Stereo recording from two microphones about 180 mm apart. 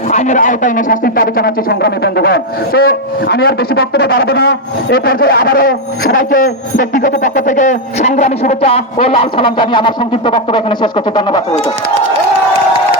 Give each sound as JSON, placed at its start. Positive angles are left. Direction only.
{"t": 0.1, "sound": "speech", "side_deg": 40}